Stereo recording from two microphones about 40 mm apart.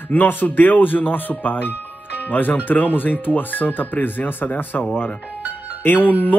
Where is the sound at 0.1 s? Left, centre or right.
Left.